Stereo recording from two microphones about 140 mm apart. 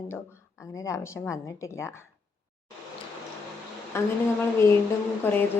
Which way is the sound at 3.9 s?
20° left (ahead or behind).